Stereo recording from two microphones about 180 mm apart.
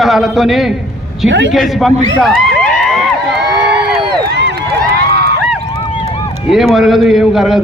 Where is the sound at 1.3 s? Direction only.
80° right.